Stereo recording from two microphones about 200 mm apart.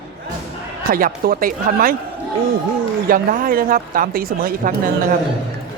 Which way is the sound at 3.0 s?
45° right (ahead or behind).